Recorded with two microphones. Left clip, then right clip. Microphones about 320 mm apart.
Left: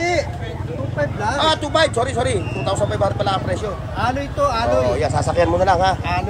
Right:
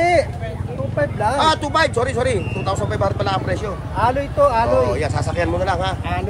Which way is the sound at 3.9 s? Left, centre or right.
Centre.